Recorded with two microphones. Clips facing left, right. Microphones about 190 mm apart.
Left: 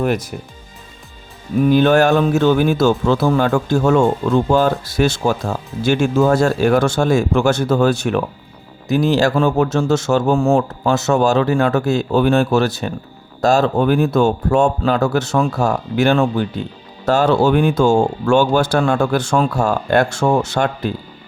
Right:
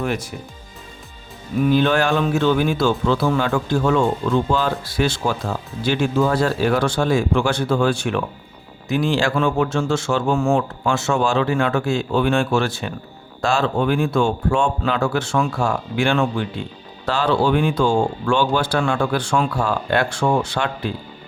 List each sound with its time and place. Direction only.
0.0 s a man's voice: 40° left (ahead or behind)
1.6 s a man's voice: 45° left (ahead or behind)